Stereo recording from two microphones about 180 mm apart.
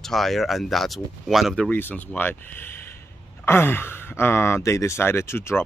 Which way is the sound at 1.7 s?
10° left (ahead or behind).